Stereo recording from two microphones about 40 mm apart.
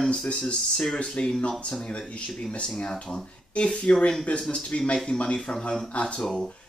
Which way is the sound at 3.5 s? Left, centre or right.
Left.